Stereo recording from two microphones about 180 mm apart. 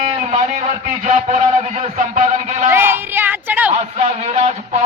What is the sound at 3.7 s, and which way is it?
A man's voice, 40° right (ahead or behind).